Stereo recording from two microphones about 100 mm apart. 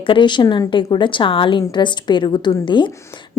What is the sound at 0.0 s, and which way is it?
A woman's voice, 55° left (ahead or behind).